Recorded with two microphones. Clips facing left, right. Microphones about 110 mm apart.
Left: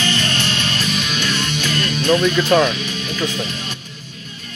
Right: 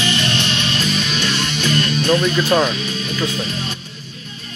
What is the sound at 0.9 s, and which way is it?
Music, 25° right (ahead or behind).